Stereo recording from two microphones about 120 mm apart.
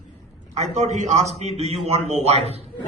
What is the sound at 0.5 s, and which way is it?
A man's voice, 70° right (ahead or behind).